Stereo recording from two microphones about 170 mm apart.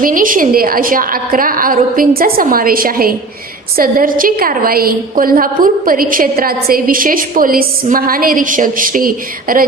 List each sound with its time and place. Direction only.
0.0 s a woman's voice: 55° right (ahead or behind)